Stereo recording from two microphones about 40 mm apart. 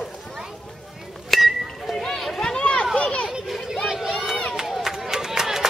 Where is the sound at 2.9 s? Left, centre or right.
Left.